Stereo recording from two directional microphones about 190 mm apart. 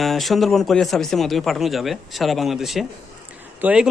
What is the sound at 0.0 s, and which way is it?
Speech, centre (ahead or behind).